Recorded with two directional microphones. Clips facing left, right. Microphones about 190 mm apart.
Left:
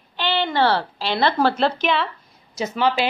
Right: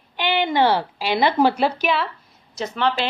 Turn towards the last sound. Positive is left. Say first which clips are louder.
# left 2 dB
turn(degrees=5)  # may be behind; listen again after turning